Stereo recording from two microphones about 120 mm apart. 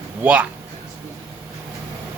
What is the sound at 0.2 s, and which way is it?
Speech, 10° right (ahead or behind).